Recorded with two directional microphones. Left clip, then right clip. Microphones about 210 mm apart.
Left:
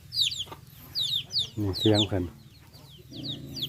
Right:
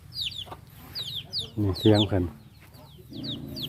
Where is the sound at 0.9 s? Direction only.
Centre (ahead or behind).